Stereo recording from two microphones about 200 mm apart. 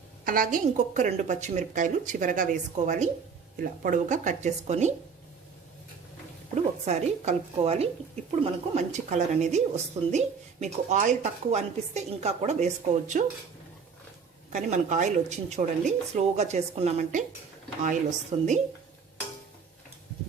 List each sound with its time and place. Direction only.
0.3 s a woman's voice: 40° right (ahead or behind)
6.5 s a woman's voice: 35° right (ahead or behind)
14.5 s a woman's voice: 40° right (ahead or behind)
18.3 s a woman's voice: 35° right (ahead or behind)